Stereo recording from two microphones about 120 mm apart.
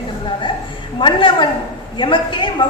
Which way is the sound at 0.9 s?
45° left (ahead or behind).